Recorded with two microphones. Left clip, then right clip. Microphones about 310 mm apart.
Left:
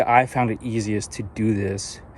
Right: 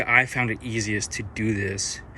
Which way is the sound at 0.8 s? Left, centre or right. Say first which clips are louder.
Left 1 dB; left.